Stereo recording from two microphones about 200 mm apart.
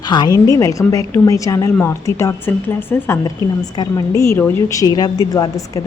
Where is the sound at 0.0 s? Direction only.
20° left (ahead or behind).